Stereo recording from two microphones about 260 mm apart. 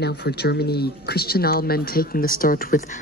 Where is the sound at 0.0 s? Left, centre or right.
Left.